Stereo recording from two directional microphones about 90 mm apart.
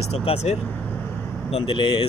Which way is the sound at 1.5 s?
85° left.